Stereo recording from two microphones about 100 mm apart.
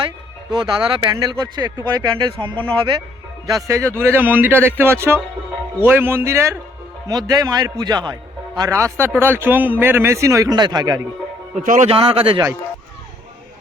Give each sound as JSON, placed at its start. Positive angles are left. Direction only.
{"t": 0.5, "sound": "speech", "side_deg": -50}
{"t": 1.0, "sound": "speech", "side_deg": -40}
{"t": 3.4, "sound": "speech", "side_deg": -35}
{"t": 7.1, "sound": "a man's voice", "side_deg": -40}
{"t": 10.5, "sound": "a man's voice", "side_deg": -40}
{"t": 11.9, "sound": "a man's voice", "side_deg": -75}